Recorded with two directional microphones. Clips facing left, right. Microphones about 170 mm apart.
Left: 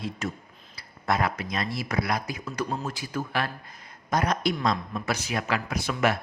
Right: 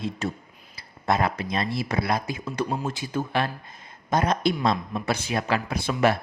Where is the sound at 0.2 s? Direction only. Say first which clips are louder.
Right 3 dB; 30° right (ahead or behind).